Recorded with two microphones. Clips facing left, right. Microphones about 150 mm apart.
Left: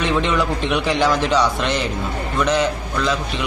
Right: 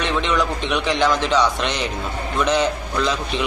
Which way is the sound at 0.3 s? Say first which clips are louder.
Left 1 dB; 5° left (ahead or behind).